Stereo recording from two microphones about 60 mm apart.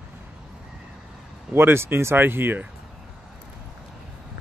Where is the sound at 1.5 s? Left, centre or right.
Right.